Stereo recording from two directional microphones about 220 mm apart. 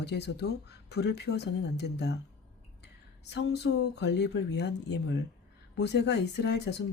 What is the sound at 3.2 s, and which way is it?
Speech, 50° left (ahead or behind).